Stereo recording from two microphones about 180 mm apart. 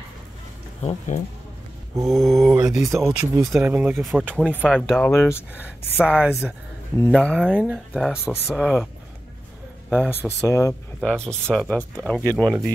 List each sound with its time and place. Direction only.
0.8 s speech: 45° left (ahead or behind)
2.0 s speech: centre (ahead or behind)
2.9 s speech: 15° right (ahead or behind)
4.6 s speech: 5° left (ahead or behind)
5.9 s speech: 5° right (ahead or behind)
9.8 s speech: 5° right (ahead or behind)
10.1 s speech: 15° left (ahead or behind)